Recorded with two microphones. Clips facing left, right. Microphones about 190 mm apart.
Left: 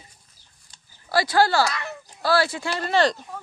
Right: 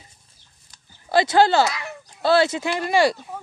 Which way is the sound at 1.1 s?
20° right (ahead or behind).